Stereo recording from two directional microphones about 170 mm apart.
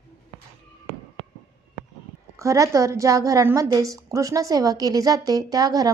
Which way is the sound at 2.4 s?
20° right (ahead or behind).